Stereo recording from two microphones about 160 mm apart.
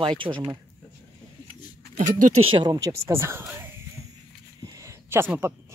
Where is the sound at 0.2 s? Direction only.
30° right (ahead or behind).